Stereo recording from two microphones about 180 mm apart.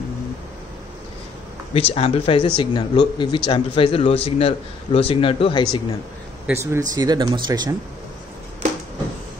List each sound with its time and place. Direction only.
1.7 s speech: 30° left (ahead or behind)
6.4 s speech: 15° right (ahead or behind)